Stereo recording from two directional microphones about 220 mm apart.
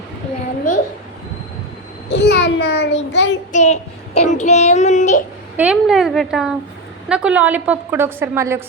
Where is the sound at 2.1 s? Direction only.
50° left (ahead or behind).